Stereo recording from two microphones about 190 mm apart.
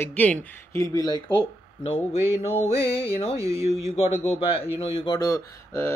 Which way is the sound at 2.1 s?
30° left (ahead or behind).